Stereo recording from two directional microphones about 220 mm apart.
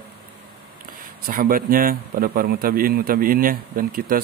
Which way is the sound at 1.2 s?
40° right (ahead or behind).